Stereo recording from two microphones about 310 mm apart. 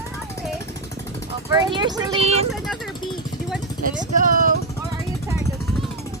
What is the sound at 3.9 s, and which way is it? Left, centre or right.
Vehicle, right.